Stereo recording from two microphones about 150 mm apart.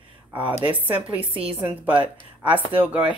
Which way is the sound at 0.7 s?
10° right (ahead or behind).